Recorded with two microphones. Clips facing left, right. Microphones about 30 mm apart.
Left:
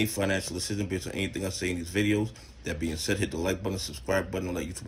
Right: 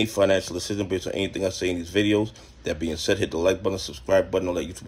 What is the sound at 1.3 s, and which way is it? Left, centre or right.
Speech, right.